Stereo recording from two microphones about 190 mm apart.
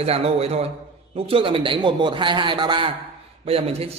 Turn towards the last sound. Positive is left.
turn(degrees=-30)  # may be behind; listen again after turning